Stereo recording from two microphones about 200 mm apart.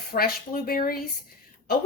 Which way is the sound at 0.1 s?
45° left (ahead or behind).